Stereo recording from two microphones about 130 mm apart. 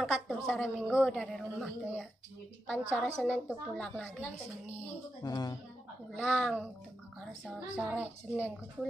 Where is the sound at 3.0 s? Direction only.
5° right (ahead or behind).